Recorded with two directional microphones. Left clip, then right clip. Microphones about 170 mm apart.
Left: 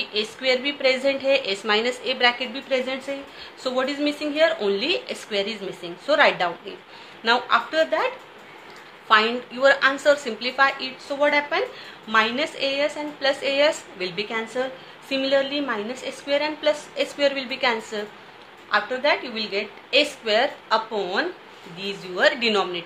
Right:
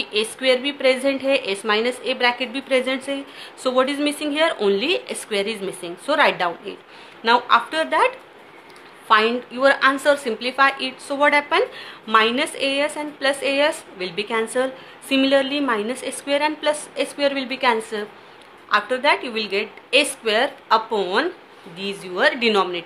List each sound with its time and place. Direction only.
0.0 s a woman's voice: 25° right (ahead or behind)